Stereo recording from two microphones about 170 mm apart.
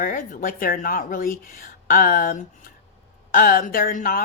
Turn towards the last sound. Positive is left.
turn(degrees=55)  # may be behind; listen again after turning